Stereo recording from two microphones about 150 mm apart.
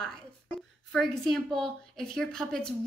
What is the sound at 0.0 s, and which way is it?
A woman's voice, 5° left (ahead or behind).